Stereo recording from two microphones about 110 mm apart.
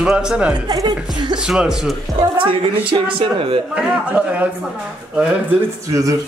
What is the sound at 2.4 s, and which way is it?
A woman's voice, 50° right (ahead or behind).